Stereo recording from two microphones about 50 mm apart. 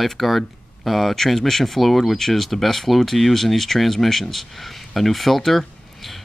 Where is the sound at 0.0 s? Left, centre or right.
Centre.